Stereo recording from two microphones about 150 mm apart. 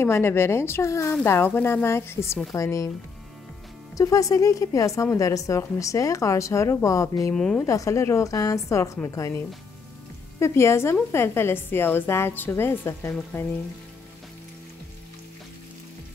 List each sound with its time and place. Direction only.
0.0 s a woman's voice: 15° left (ahead or behind)
3.9 s a woman's voice: 20° left (ahead or behind)
7.3 s speech: 5° left (ahead or behind)
7.6 s a woman's voice: 20° left (ahead or behind)
10.4 s a woman's voice: 15° left (ahead or behind)